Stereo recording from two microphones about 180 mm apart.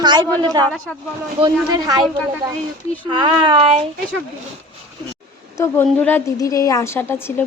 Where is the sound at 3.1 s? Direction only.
25° right (ahead or behind).